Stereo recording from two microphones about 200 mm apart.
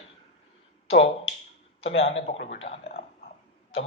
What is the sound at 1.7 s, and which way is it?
Speech, 30° left (ahead or behind).